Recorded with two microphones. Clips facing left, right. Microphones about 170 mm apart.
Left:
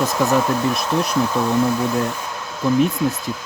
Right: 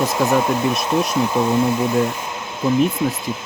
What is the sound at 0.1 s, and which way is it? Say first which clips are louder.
Speech: right 1 dB; 15° right (ahead or behind).